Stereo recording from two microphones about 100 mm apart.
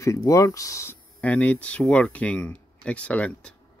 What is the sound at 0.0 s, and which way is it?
Speech, 35° left (ahead or behind).